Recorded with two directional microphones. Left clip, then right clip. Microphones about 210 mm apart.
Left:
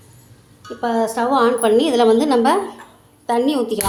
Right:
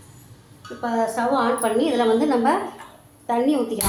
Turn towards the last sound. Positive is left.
turn(degrees=40)  # may be behind; listen again after turning